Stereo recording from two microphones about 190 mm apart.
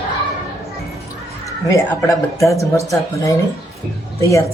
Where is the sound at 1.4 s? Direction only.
15° left (ahead or behind).